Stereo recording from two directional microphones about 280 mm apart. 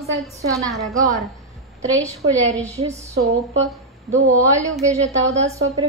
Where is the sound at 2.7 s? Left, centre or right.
Right.